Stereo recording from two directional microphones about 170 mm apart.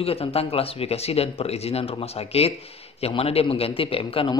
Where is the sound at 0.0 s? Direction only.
35° left (ahead or behind).